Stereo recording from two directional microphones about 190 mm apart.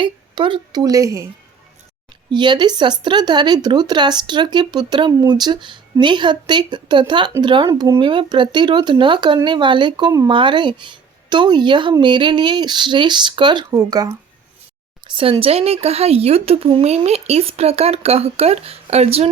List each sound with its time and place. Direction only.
0.0 s speech: 25° right (ahead or behind)
2.3 s speech: 25° right (ahead or behind)